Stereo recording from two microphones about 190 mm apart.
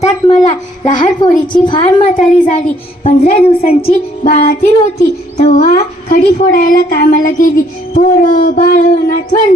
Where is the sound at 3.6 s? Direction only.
50° left (ahead or behind).